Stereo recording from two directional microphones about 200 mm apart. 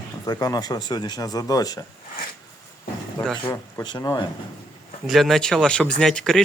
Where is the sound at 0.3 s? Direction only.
20° left (ahead or behind).